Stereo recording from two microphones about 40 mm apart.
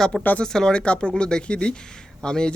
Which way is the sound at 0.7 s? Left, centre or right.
Left.